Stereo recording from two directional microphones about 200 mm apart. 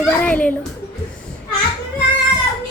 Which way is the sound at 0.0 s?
5° left (ahead or behind).